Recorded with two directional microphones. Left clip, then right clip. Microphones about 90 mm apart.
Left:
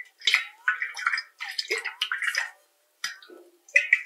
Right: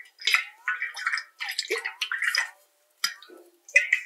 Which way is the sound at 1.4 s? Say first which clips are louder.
Even; 10° right (ahead or behind).